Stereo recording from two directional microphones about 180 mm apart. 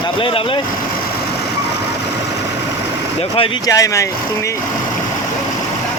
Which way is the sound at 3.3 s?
30° left (ahead or behind).